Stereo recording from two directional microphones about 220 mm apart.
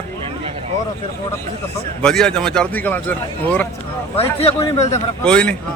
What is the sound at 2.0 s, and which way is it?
A man's voice, 5° left (ahead or behind).